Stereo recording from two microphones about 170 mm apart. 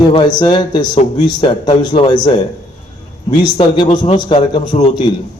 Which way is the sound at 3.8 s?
35° left (ahead or behind).